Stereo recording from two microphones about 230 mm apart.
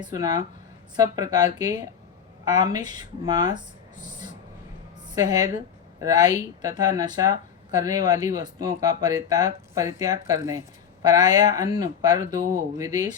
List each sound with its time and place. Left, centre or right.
0.0 s speech: centre
5.1 s speech: centre